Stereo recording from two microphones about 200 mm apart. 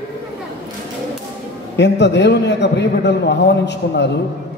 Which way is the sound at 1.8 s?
60° left (ahead or behind).